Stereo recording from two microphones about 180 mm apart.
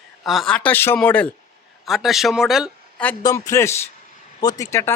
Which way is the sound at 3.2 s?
15° left (ahead or behind).